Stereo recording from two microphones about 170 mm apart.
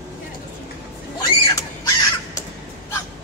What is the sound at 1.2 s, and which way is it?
Crow, 20° left (ahead or behind).